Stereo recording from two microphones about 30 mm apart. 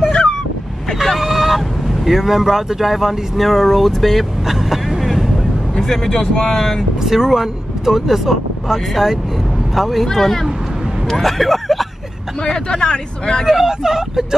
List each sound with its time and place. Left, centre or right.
1.2 s fowl: centre
2.0 s speech: centre
4.5 s vehicle: centre
5.0 s boat: centre
5.8 s speech: centre
7.0 s speech: centre
10.0 s speech: centre
11.1 s a sound: centre
12.4 s speech: left
13.5 s speech: centre